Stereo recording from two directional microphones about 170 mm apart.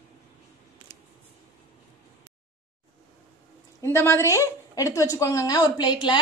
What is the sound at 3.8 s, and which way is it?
A woman's voice, 15° left (ahead or behind).